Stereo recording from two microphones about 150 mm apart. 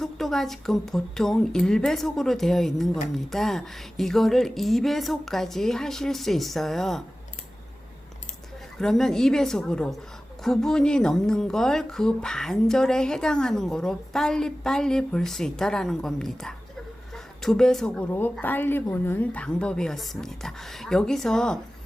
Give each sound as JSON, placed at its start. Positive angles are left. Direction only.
{"t": 0.0, "sound": "speech", "side_deg": 0}
{"t": 8.8, "sound": "speech", "side_deg": 5}